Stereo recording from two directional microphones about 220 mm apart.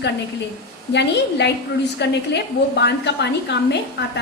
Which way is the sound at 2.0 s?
50° left (ahead or behind).